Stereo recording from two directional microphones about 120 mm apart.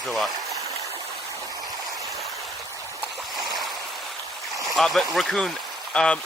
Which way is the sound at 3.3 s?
Centre (ahead or behind).